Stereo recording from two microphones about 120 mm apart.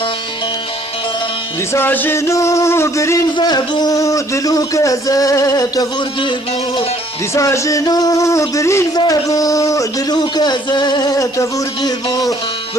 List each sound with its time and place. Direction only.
1.7 s a man's voice: 15° left (ahead or behind)
3.3 s a man's voice: 35° left (ahead or behind)
7.3 s a man's voice: 25° left (ahead or behind)